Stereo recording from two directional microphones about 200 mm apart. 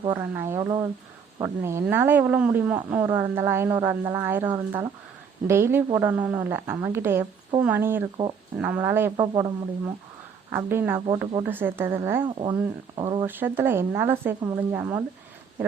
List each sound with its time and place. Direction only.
0.1 s speech: 10° right (ahead or behind)
12.2 s speech: 25° right (ahead or behind)
13.2 s speech: 10° right (ahead or behind)